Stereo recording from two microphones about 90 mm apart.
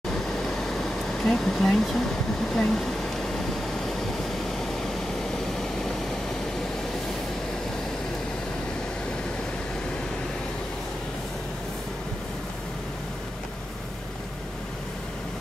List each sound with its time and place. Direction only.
0.4 s air conditioning: 5° left (ahead or behind)
2.5 s speech: 5° left (ahead or behind)